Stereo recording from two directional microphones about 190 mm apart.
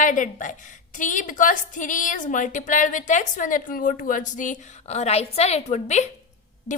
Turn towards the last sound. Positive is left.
turn(degrees=35)  # may be behind; listen again after turning